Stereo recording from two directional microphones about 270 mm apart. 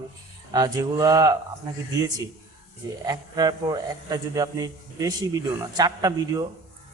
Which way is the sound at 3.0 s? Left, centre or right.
Centre.